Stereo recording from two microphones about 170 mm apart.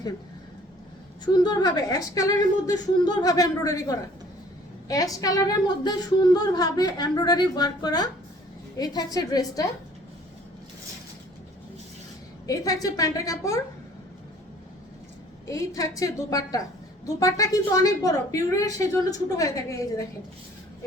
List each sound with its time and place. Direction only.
1.2 s a woman's voice: 25° left (ahead or behind)
12.5 s a woman's voice: 20° left (ahead or behind)
15.4 s a woman's voice: 20° left (ahead or behind)